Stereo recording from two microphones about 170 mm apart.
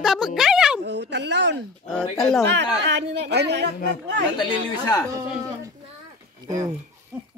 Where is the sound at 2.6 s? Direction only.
85° right.